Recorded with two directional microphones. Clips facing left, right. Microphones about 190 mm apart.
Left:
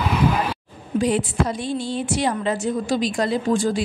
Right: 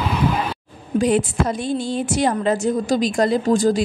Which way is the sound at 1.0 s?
50° right (ahead or behind).